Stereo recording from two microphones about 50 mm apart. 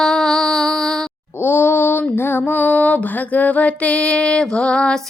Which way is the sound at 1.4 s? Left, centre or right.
Left.